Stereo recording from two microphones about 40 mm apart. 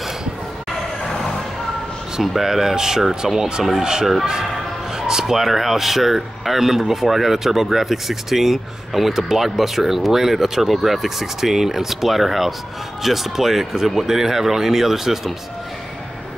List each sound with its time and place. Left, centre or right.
1.0 s music: centre
2.2 s speech: centre